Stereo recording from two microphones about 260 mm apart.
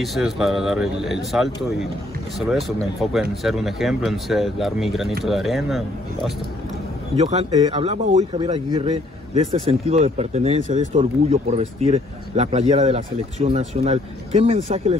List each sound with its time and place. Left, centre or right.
0.0 s speech: centre
7.2 s speech: right